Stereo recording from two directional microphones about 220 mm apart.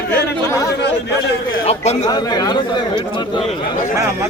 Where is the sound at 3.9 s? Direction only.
15° right (ahead or behind).